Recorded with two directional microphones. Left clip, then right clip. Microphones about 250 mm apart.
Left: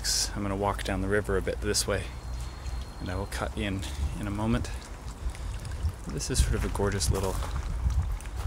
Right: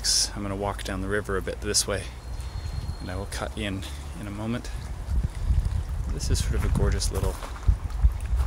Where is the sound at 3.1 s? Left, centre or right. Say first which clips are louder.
Even; centre.